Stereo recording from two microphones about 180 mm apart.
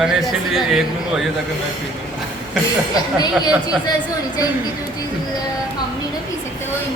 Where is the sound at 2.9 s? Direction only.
20° left (ahead or behind).